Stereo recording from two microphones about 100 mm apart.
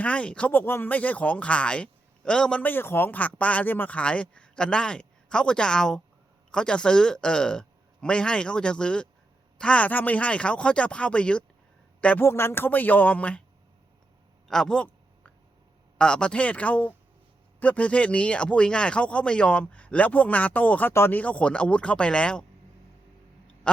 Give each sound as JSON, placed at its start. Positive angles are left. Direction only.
{"t": 0.0, "sound": "a man's voice", "side_deg": 10}
{"t": 14.4, "sound": "a man's voice", "side_deg": 5}
{"t": 16.0, "sound": "a man's voice", "side_deg": 10}